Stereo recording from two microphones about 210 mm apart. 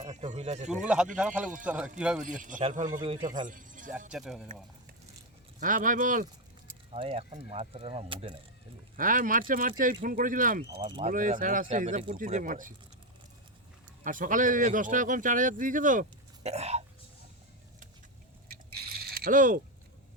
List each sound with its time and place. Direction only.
0.0 s speech: 30° right (ahead or behind)
0.7 s speech: 5° right (ahead or behind)
2.2 s speech: 40° right (ahead or behind)
3.0 s speech: 25° right (ahead or behind)
3.4 s speech: 40° right (ahead or behind)
4.1 s speech: 5° right (ahead or behind)
5.5 s speech: 40° right (ahead or behind)
6.7 s speech: 30° right (ahead or behind)
9.0 s speech: 40° right (ahead or behind)
10.7 s speech: 25° right (ahead or behind)
11.1 s speech: 40° right (ahead or behind)
14.0 s speech: 40° right (ahead or behind)
18.4 s biting: 45° right (ahead or behind)